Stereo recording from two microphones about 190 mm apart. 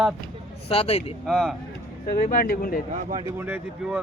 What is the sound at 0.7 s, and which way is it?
Speech, 30° left (ahead or behind).